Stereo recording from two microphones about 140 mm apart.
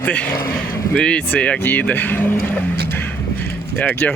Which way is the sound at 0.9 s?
5° left (ahead or behind).